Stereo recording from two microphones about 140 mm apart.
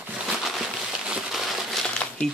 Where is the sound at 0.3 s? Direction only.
Centre (ahead or behind).